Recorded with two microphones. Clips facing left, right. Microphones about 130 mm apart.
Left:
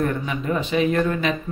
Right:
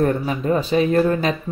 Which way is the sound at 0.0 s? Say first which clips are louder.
Right 4 dB; 35° right (ahead or behind).